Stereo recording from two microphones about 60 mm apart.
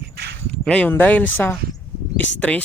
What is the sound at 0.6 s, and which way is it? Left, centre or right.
A man's voice, left.